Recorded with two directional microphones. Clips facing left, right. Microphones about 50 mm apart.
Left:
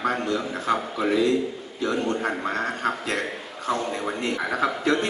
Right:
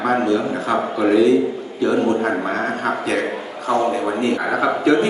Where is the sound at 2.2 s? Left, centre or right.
Right.